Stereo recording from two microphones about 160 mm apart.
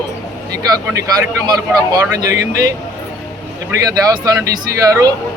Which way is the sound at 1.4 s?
25° right (ahead or behind).